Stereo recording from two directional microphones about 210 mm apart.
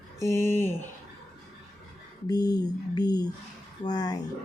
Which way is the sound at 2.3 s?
20° left (ahead or behind).